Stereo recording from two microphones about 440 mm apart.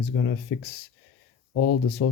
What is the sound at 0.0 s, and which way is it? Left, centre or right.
Speech, left.